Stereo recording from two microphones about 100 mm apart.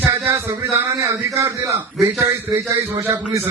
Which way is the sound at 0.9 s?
30° right (ahead or behind).